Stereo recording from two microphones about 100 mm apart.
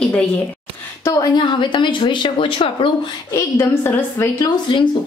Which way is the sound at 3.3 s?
30° left (ahead or behind).